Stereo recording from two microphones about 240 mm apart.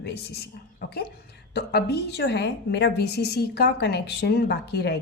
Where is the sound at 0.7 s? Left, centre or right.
Left.